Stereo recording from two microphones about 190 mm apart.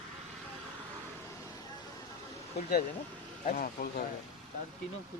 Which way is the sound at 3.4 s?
45° left (ahead or behind).